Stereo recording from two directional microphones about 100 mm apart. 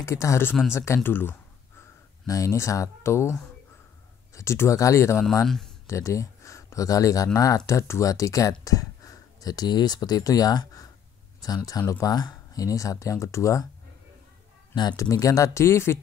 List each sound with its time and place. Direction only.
0.0 s speech: 30° left (ahead or behind)
1.8 s speech: 35° left (ahead or behind)
5.4 s speech: 5° left (ahead or behind)
5.9 s speech: 30° left (ahead or behind)
14.8 s speech: 40° left (ahead or behind)